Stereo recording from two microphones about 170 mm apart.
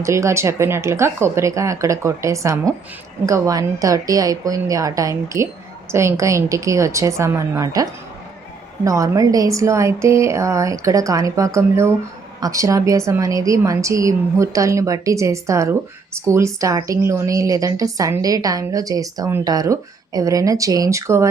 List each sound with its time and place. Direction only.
0.0 s a woman's voice: 15° right (ahead or behind)